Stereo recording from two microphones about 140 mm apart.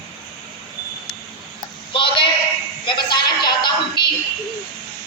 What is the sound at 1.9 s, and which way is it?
Speech, 35° left (ahead or behind).